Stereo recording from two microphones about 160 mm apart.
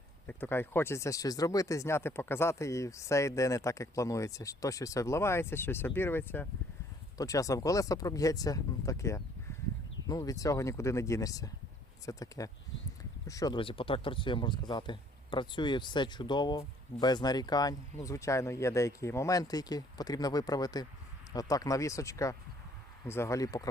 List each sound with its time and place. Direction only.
0.3 s speech: 10° left (ahead or behind)
13.6 s speech: 35° left (ahead or behind)